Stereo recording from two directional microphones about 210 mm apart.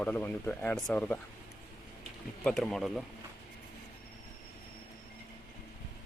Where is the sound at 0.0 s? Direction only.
10° left (ahead or behind).